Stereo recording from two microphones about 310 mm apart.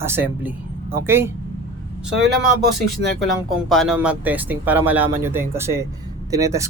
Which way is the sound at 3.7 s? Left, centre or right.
Centre.